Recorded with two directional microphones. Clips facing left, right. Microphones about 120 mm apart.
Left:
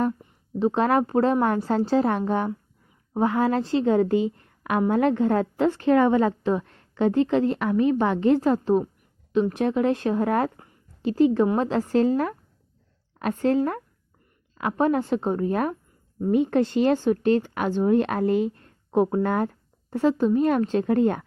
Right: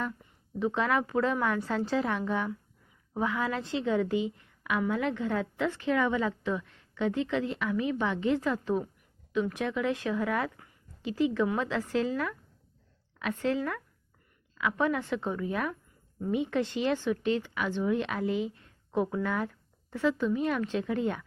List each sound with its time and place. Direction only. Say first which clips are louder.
0.6 s a woman's voice: left 7 dB; 35° left (ahead or behind)